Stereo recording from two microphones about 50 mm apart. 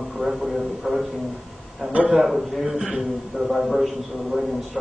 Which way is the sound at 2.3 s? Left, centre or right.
Centre.